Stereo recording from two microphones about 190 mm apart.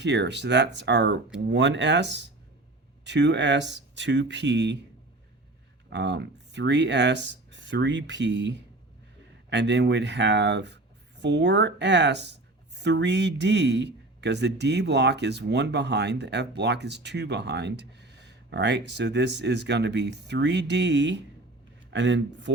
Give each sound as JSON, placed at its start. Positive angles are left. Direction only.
{"t": 0.0, "sound": "speech", "side_deg": -65}
{"t": 5.9, "sound": "speech", "side_deg": -65}